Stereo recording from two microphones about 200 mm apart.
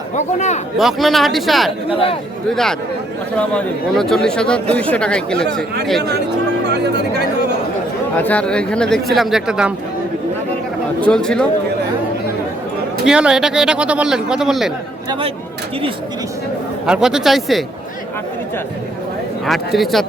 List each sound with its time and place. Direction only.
0.2 s speech: 35° left (ahead or behind)
0.8 s a man's voice: centre (ahead or behind)
1.9 s a man's voice: 25° left (ahead or behind)
3.3 s a man's voice: 5° left (ahead or behind)
6.7 s speech: 55° right (ahead or behind)
8.2 s a man's voice: 5° left (ahead or behind)
11.0 s a man's voice: 5° left (ahead or behind)
13.1 s a man's voice: 5° right (ahead or behind)
16.8 s a man's voice: 5° right (ahead or behind)
19.5 s a man's voice: centre (ahead or behind)